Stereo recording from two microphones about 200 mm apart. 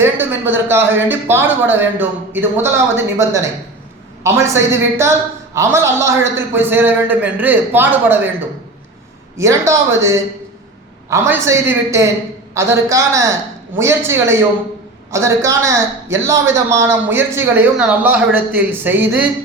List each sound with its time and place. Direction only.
0.0 s a man's voice: 10° right (ahead or behind)